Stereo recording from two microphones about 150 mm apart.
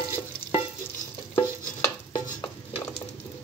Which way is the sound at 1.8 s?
20° left (ahead or behind).